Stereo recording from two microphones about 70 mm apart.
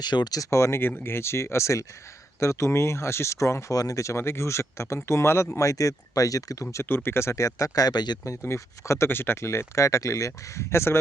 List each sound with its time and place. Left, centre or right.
0.0 s speech: left
0.5 s speech: left
5.5 s speech: left
6.8 s speech: left
7.9 s speech: left
8.4 s speech: left